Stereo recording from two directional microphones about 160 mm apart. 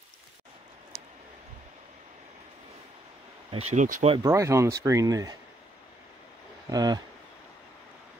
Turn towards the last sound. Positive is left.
turn(degrees=-25)  # may be behind; listen again after turning